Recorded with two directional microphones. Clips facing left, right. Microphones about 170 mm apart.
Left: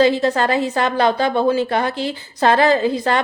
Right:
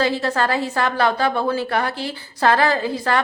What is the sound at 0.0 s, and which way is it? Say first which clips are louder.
A woman's voice: left 5 dB; 20° left (ahead or behind).